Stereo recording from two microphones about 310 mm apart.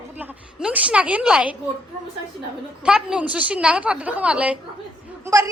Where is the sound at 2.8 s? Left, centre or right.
Centre.